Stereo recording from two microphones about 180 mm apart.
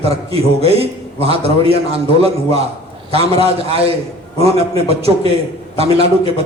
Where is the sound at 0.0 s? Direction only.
35° right (ahead or behind).